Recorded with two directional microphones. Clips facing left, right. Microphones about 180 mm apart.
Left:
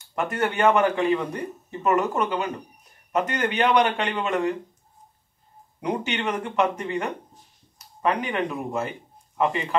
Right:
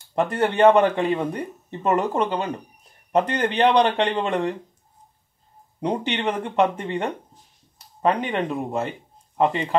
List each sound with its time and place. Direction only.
0.1 s speech: 30° right (ahead or behind)
5.8 s speech: 30° right (ahead or behind)